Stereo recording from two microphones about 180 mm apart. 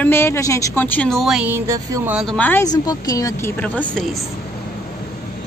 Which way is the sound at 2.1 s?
Centre (ahead or behind).